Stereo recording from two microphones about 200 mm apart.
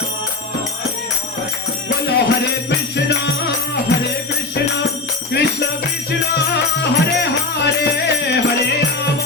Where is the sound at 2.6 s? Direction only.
55° left (ahead or behind).